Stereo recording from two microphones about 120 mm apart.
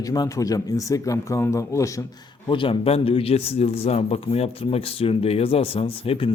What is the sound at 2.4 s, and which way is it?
A man's voice, 45° left (ahead or behind).